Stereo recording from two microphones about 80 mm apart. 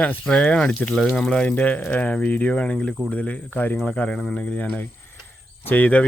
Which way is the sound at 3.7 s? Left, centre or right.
Centre.